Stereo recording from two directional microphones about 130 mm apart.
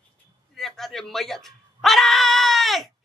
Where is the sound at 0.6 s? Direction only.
Centre (ahead or behind).